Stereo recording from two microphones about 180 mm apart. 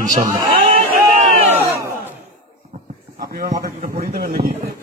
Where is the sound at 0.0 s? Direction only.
45° right (ahead or behind).